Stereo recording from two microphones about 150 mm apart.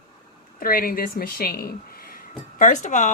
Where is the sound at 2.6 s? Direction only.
55° left (ahead or behind).